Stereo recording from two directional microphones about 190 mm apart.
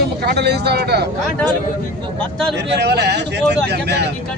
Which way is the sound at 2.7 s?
60° right (ahead or behind).